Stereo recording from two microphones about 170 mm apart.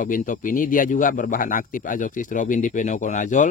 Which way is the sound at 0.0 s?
50° left (ahead or behind).